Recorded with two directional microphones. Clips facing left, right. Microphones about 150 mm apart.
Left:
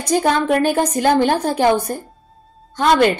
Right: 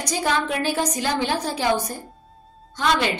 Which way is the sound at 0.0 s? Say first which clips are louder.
Left 7 dB; 50° left (ahead or behind).